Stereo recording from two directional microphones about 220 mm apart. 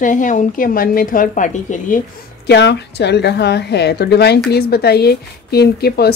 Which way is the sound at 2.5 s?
50° left (ahead or behind).